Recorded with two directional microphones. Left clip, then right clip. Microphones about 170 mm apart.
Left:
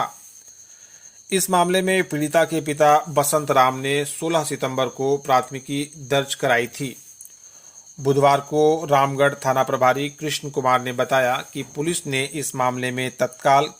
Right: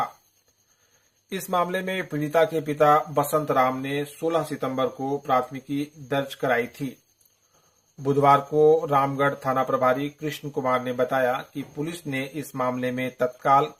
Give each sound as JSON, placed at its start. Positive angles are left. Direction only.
{"t": 1.3, "sound": "speech", "side_deg": 30}
{"t": 8.0, "sound": "speech", "side_deg": 25}